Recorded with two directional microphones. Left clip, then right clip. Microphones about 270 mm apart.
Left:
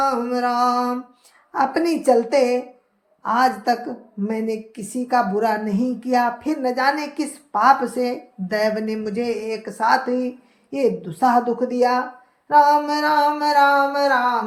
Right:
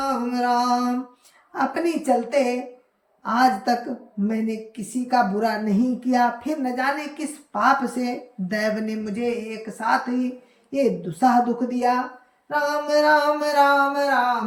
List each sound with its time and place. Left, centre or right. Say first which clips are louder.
0.3 s a woman's voice: left 2 dB; centre